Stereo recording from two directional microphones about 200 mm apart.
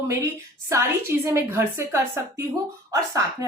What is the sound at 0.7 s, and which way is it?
A woman's voice, 15° right (ahead or behind).